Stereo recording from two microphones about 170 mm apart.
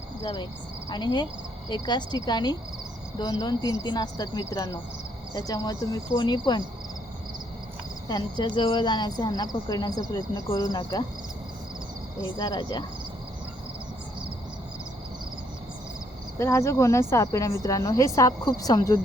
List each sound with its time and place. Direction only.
0.9 s speech: 25° left (ahead or behind)
8.0 s speech: 25° left (ahead or behind)
12.2 s speech: 25° left (ahead or behind)
16.4 s a woman's voice: 15° left (ahead or behind)